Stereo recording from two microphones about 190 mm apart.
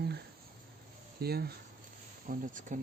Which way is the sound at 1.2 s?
55° right (ahead or behind).